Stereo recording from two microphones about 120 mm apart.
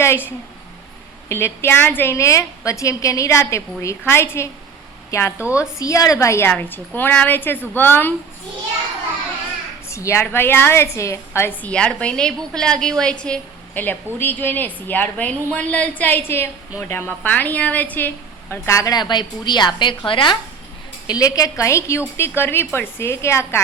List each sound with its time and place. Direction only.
0.0 s a woman's voice: 20° left (ahead or behind)
5.4 s a woman's voice: 10° right (ahead or behind)
5.8 s a woman's voice: 30° left (ahead or behind)
9.9 s a woman's voice: 25° left (ahead or behind)
11.7 s a woman's voice: 10° left (ahead or behind)
18.5 s a woman's voice: 25° left (ahead or behind); by 20.4 s 45° left (ahead or behind)
21.1 s a woman's voice: 30° left (ahead or behind)